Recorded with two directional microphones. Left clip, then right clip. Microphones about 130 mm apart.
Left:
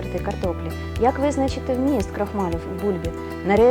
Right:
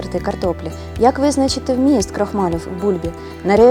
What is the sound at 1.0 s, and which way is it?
Speech, 35° right (ahead or behind).